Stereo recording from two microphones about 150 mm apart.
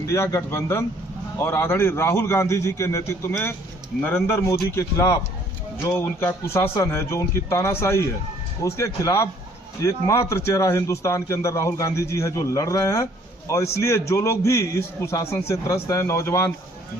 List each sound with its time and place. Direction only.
0.0 s a man's voice: 20° left (ahead or behind)